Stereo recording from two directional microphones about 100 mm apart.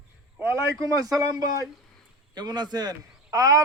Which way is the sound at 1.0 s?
35° right (ahead or behind).